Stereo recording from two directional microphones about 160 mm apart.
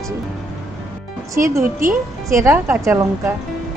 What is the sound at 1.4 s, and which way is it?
A woman's voice, 15° right (ahead or behind).